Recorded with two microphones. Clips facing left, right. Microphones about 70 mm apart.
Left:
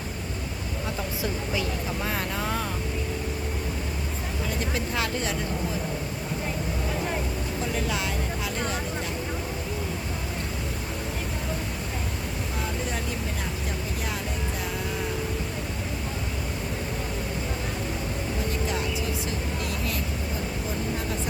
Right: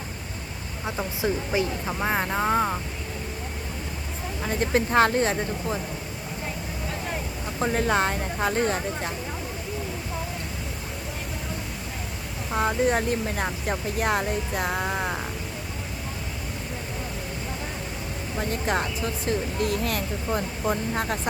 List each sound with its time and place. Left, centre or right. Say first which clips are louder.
0.9 s speech: right 5 dB; right
4.4 s speech: right 7 dB; right
7.6 s speech: right 8 dB; right
12.5 s speech: right 11 dB; right
18.3 s speech: right 6 dB; right